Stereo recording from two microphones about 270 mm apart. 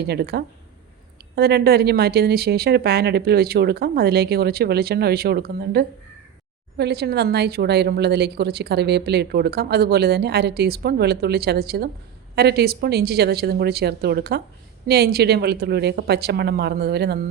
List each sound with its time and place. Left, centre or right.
0.0 s a woman's voice: right